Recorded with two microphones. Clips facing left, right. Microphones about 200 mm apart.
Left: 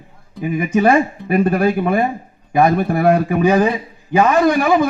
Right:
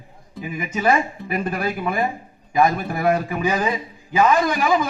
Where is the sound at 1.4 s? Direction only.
35° left (ahead or behind).